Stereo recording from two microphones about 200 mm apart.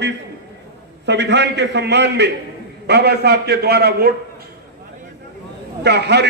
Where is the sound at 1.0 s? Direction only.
60° right (ahead or behind).